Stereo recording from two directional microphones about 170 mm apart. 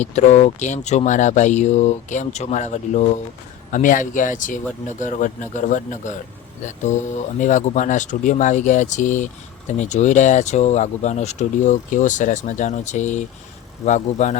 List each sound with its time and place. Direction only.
0.0 s speech: 45° left (ahead or behind)